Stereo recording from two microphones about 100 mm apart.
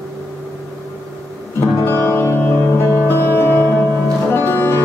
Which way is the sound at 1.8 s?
20° left (ahead or behind).